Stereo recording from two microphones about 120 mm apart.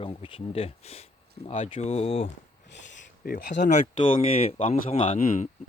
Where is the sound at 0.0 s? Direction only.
50° left (ahead or behind).